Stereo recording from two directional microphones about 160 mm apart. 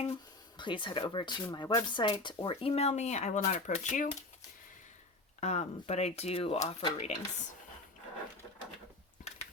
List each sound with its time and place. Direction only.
0.0 s speech: 30° left (ahead or behind); by 4.1 s 50° left (ahead or behind)
5.4 s speech: 45° left (ahead or behind)